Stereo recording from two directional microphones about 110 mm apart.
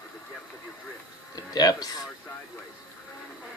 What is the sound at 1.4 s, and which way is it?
Speech, 35° left (ahead or behind).